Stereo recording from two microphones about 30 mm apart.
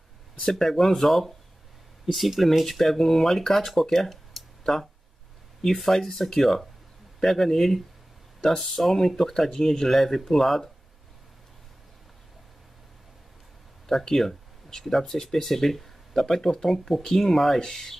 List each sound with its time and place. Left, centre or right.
0.5 s speech: centre
5.6 s speech: centre
13.8 s speech: centre
17.6 s speech: centre